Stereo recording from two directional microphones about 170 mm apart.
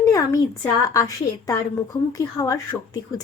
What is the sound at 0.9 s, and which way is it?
Speech, 20° left (ahead or behind).